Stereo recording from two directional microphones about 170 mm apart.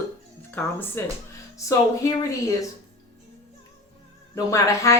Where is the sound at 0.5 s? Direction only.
10° left (ahead or behind).